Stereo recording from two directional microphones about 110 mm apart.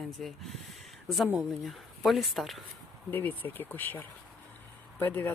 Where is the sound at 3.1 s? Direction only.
20° left (ahead or behind).